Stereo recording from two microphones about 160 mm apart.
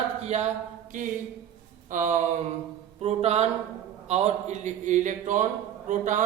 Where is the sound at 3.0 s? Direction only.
40° right (ahead or behind).